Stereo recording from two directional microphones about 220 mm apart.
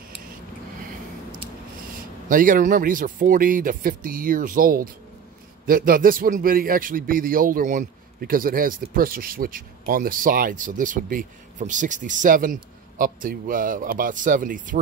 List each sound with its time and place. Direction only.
2.2 s a man's voice: 40° right (ahead or behind)